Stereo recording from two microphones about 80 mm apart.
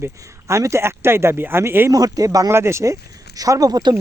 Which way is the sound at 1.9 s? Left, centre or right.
Right.